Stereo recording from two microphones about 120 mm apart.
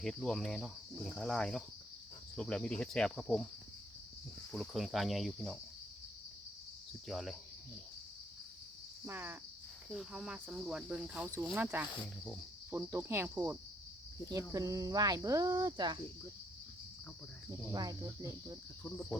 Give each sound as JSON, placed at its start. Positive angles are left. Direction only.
{"t": 0.0, "sound": "speech", "side_deg": 5}
{"t": 2.3, "sound": "cricket", "side_deg": 10}
{"t": 4.5, "sound": "speech", "side_deg": 0}
{"t": 7.1, "sound": "speech", "side_deg": 0}
{"t": 9.0, "sound": "speech", "side_deg": -15}
{"t": 9.9, "sound": "speech", "side_deg": -5}
{"t": 17.7, "sound": "speech", "side_deg": -30}
{"t": 18.8, "sound": "cricket", "side_deg": 10}